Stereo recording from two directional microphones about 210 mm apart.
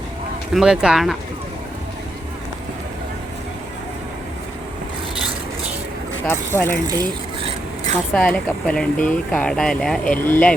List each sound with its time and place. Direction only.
0.5 s speech: 5° right (ahead or behind)
6.2 s speech: 10° left (ahead or behind)
6.8 s speech: 20° right (ahead or behind)
8.1 s speech: 5° left (ahead or behind)